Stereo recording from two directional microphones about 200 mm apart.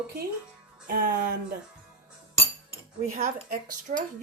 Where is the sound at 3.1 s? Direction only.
40° right (ahead or behind).